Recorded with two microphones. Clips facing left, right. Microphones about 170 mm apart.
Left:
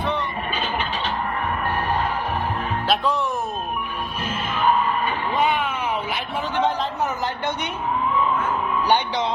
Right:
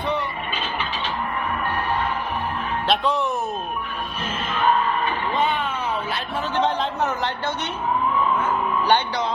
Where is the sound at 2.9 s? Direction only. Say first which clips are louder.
Right 1 dB; centre (ahead or behind).